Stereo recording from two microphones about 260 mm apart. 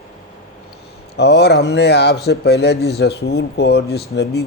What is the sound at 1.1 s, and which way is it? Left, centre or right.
A man's voice, left.